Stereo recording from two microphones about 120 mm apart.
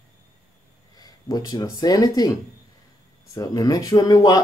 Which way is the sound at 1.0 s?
35° left (ahead or behind).